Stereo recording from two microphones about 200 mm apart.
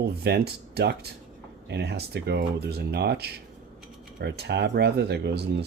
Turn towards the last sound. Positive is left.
turn(degrees=-55)  # may be behind; listen again after turning